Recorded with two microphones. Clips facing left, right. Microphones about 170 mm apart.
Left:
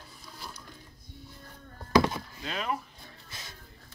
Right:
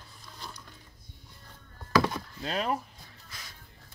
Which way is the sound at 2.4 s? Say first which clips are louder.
Right 4 dB; 35° right (ahead or behind).